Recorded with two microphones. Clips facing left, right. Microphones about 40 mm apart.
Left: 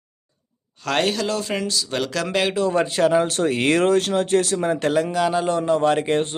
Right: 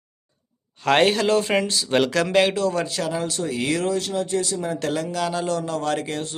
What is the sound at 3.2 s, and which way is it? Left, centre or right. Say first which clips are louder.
Speech: left 5 dB; left.